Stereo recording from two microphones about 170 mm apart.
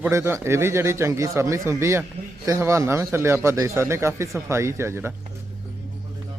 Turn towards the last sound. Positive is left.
turn(degrees=-15)  # may be behind; listen again after turning